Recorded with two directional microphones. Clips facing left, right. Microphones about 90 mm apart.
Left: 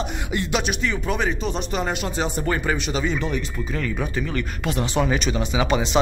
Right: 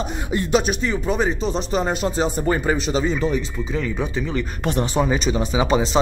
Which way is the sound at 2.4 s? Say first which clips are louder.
Right 3 dB; 20° right (ahead or behind).